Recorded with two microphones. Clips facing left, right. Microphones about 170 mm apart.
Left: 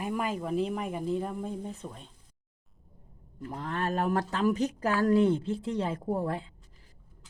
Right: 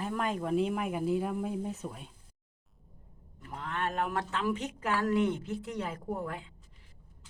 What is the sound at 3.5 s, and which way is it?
Speech, 40° left (ahead or behind).